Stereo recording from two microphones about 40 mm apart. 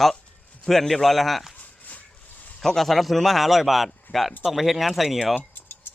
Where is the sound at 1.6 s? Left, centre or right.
Left.